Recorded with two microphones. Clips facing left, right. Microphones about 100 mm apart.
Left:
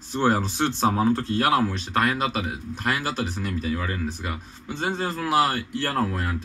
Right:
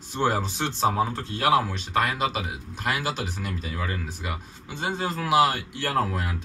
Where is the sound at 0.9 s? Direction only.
10° right (ahead or behind).